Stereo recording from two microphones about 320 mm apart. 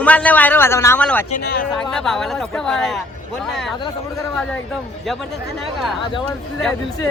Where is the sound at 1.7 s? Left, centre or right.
Centre.